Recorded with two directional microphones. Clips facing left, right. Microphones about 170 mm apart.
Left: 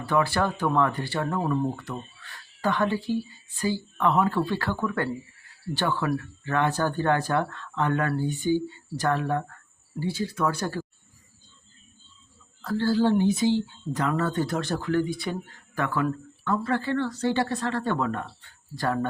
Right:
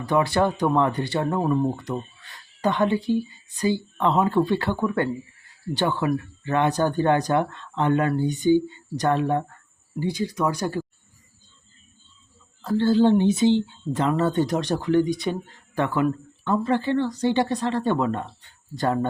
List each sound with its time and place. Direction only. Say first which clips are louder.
0.0 s speech: right 3 dB; 20° right (ahead or behind)
12.6 s speech: right 4 dB; 20° right (ahead or behind)